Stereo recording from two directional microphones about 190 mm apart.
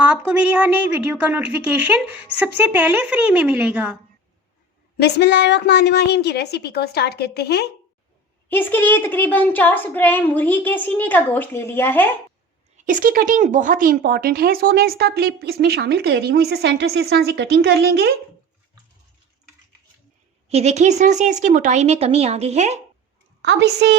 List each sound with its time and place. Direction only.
0.0 s a woman's voice: 10° right (ahead or behind)
4.9 s a woman's voice: 60° left (ahead or behind)
8.4 s a woman's voice: 10° left (ahead or behind)
12.7 s speech: 45° right (ahead or behind); by 18.1 s 60° right (ahead or behind)
20.5 s speech: 35° right (ahead or behind)
23.4 s speech: 60° right (ahead or behind)